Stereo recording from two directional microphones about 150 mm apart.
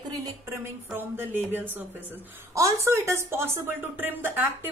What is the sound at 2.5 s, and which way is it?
A woman's voice, 20° right (ahead or behind).